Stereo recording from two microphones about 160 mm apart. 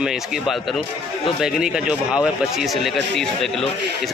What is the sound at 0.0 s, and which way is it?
Speech, 5° right (ahead or behind).